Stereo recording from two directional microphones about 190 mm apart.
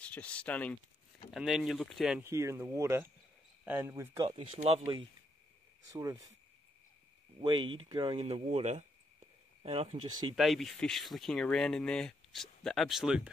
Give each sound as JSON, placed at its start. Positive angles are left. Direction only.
{"t": 0.0, "sound": "speech", "side_deg": 5}
{"t": 4.3, "sound": "speech", "side_deg": -30}
{"t": 5.9, "sound": "speech", "side_deg": -20}
{"t": 7.3, "sound": "speech", "side_deg": -25}
{"t": 10.3, "sound": "speech", "side_deg": 0}